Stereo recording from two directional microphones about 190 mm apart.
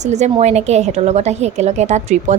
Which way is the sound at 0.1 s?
35° right (ahead or behind).